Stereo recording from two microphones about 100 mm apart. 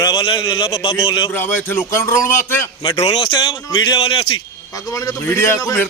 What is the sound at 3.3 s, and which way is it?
A man's voice, 50° left (ahead or behind).